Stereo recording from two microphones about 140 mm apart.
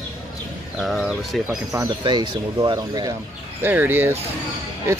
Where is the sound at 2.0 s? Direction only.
35° right (ahead or behind).